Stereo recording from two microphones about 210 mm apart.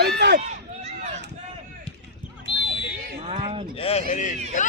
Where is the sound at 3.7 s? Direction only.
25° left (ahead or behind).